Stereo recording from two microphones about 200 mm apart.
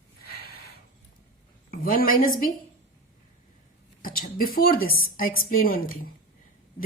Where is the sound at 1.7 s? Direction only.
45° left (ahead or behind).